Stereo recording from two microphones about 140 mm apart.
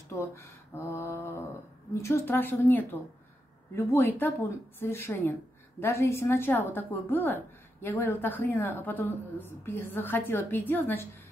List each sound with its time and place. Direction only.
0.1 s mantra: 20° left (ahead or behind)
2.0 s a woman's voice: 15° left (ahead or behind)